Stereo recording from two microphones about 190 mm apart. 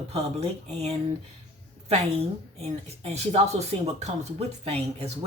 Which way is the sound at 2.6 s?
35° right (ahead or behind).